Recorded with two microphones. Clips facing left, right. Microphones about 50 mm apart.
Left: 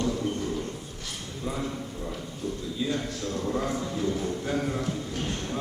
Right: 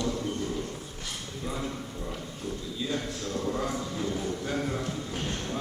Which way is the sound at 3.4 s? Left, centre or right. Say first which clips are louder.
Left 2 dB; centre.